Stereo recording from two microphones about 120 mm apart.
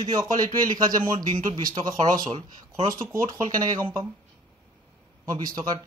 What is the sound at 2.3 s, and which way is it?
Speech, 55° right (ahead or behind).